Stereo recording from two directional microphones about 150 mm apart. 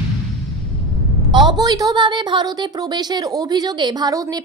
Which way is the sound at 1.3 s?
30° right (ahead or behind).